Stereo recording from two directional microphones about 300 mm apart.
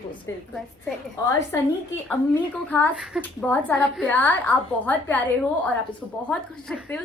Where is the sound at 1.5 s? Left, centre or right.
Centre.